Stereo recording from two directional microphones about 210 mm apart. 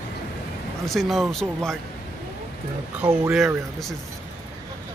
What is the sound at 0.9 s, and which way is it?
Speech, centre (ahead or behind).